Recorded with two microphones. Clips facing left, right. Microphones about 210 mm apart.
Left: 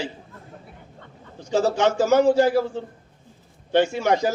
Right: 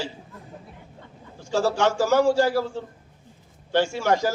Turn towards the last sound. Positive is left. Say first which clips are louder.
# left 1 dB
turn(degrees=20)  # may be behind; listen again after turning